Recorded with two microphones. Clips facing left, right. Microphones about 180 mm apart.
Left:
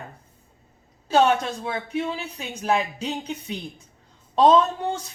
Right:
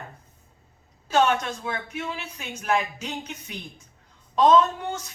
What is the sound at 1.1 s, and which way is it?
A woman's voice, 30° left (ahead or behind).